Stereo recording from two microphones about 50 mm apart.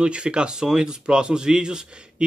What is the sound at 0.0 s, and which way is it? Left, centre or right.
Speech, centre.